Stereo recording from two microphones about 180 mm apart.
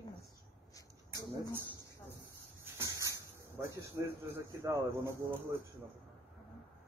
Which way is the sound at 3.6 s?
15° right (ahead or behind).